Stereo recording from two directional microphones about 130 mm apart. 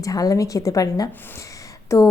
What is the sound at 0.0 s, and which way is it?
A woman's voice, 30° left (ahead or behind).